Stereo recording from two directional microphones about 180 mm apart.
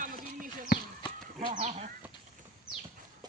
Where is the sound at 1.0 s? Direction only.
25° left (ahead or behind).